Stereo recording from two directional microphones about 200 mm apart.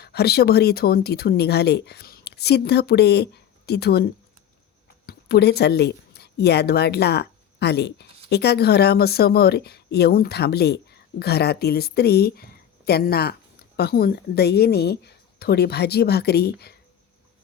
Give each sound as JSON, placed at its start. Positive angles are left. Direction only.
{"t": 0.0, "sound": "speech", "side_deg": 55}